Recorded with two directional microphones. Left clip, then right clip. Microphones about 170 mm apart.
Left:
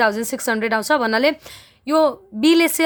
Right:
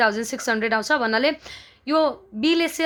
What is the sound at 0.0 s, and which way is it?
A woman's voice, 30° left (ahead or behind).